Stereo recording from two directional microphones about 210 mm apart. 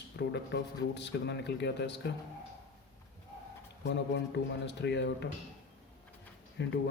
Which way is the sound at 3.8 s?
55° left (ahead or behind).